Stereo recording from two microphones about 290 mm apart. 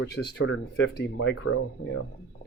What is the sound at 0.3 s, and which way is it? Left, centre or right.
Speech, left.